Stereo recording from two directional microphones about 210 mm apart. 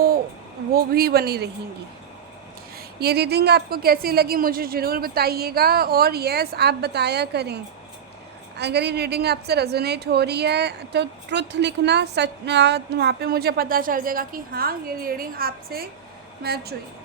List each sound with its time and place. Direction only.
0.7 s a woman's voice: 45° right (ahead or behind)
2.7 s a woman's voice: 50° right (ahead or behind)